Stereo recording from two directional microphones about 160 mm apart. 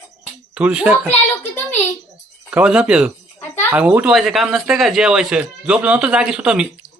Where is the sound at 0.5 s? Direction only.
5° right (ahead or behind).